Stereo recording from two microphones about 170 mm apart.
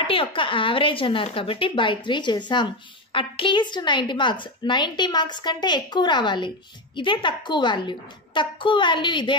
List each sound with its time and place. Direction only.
0.0 s a woman's voice: 30° left (ahead or behind)